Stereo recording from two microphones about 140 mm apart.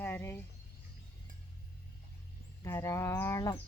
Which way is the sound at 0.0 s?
15° left (ahead or behind).